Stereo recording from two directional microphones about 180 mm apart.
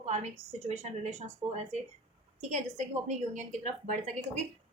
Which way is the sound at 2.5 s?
40° right (ahead or behind).